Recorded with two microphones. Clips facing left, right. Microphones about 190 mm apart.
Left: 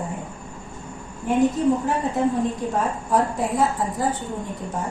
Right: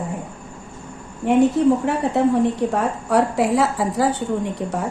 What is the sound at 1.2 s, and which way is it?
A woman's voice, 70° right (ahead or behind).